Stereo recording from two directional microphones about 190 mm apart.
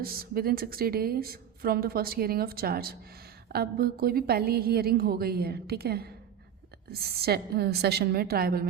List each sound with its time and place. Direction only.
0.0 s a woman's voice: 50° right (ahead or behind)
7.2 s a woman's voice: 55° right (ahead or behind)